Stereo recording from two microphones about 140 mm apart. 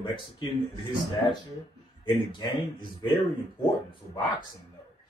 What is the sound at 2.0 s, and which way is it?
Speech, 35° left (ahead or behind).